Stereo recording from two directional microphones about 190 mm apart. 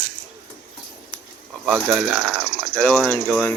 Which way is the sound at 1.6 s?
Centre (ahead or behind).